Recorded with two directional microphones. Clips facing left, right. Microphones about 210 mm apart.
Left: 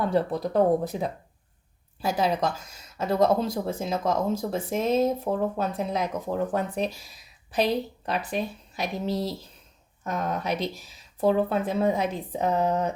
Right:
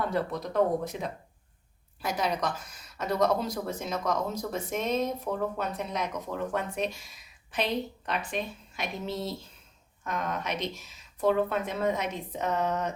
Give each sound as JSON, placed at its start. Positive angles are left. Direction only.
{"t": 0.1, "sound": "speech", "side_deg": 30}